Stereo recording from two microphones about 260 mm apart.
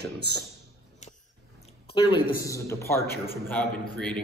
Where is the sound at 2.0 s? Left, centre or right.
Centre.